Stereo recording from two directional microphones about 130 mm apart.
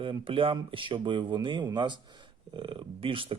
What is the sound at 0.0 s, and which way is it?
Speech, 45° right (ahead or behind).